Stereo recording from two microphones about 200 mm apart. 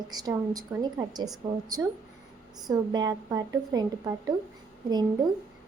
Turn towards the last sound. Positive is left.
turn(degrees=-20)  # may be behind; listen again after turning